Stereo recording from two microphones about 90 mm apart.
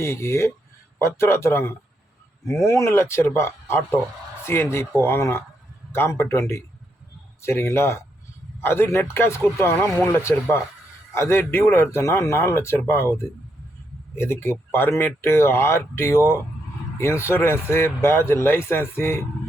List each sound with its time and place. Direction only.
0.0 s a man's voice: 30° left (ahead or behind)
14.2 s speech: 25° left (ahead or behind)